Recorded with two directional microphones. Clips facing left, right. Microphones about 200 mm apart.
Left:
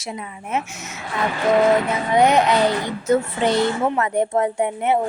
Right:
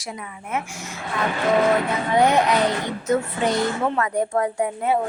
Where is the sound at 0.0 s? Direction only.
25° left (ahead or behind).